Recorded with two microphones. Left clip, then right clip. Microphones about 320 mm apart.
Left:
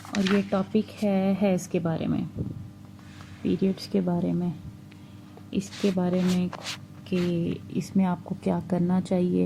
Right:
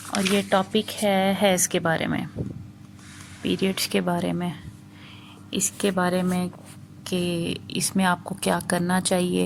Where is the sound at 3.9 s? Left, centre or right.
Right.